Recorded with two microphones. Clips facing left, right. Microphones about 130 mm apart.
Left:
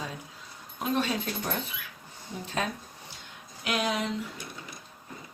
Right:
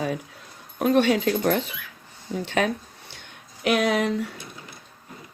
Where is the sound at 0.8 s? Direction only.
70° right (ahead or behind); by 2.6 s 85° right.